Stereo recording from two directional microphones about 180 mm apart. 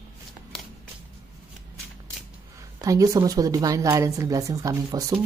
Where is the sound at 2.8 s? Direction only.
20° right (ahead or behind).